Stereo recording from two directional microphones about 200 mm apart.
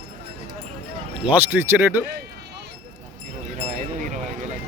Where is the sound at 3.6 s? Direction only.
35° right (ahead or behind).